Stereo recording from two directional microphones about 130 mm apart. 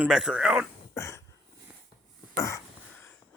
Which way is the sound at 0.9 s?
25° left (ahead or behind).